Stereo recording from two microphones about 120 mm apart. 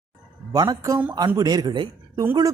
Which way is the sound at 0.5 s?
35° right (ahead or behind).